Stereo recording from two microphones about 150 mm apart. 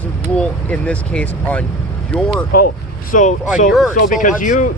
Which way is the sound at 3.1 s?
60° left (ahead or behind).